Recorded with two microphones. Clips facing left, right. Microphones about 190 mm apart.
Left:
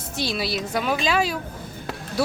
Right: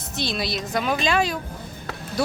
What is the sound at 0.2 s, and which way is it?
A woman's voice, 5° left (ahead or behind).